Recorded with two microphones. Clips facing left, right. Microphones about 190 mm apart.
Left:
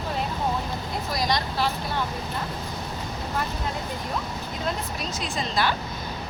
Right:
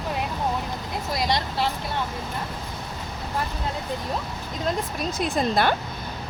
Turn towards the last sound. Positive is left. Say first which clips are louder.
# right 4 dB
turn(degrees=-55)  # may be behind; listen again after turning